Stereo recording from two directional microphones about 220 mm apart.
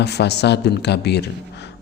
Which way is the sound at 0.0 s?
50° left (ahead or behind).